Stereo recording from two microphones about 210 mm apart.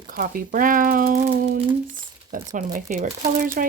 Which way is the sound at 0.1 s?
40° right (ahead or behind).